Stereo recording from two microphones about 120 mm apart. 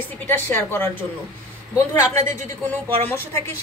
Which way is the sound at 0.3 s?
15° left (ahead or behind).